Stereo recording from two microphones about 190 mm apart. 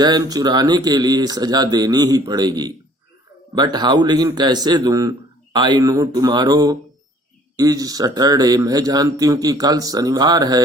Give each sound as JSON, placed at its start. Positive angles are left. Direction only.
{"t": 0.0, "sound": "speech", "side_deg": -20}